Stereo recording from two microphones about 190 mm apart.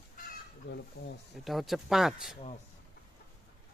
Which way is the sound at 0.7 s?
65° left (ahead or behind).